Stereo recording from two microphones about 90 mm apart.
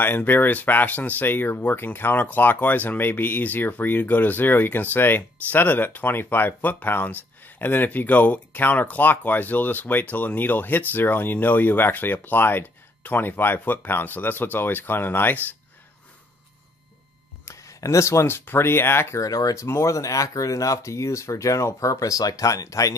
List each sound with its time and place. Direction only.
0.0 s speech: 20° left (ahead or behind)
17.5 s speech: 35° left (ahead or behind)